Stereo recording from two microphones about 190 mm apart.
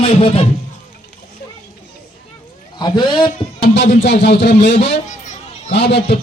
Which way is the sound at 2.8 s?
25° left (ahead or behind).